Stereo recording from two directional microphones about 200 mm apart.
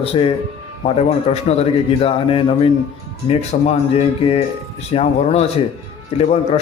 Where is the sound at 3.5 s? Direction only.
40° left (ahead or behind).